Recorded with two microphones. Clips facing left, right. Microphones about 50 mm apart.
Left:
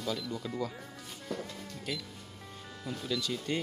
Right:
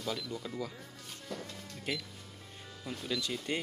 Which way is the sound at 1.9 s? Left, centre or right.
Right.